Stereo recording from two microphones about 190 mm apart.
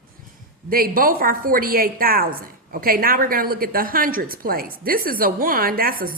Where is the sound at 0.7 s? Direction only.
50° right (ahead or behind).